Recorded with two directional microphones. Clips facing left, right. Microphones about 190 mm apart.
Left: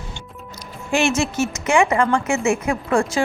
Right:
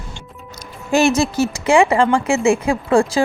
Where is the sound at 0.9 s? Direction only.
40° right (ahead or behind).